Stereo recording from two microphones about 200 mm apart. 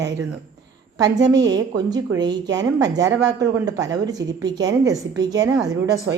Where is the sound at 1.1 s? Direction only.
20° right (ahead or behind).